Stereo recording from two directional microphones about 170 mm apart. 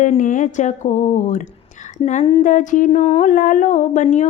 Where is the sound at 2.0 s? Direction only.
40° left (ahead or behind).